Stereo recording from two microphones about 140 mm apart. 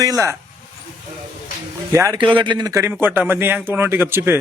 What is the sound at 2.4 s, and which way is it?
A man's voice, 30° right (ahead or behind).